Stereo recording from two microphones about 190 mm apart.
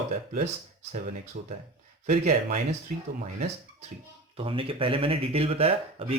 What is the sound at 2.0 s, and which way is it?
Speech, 40° right (ahead or behind).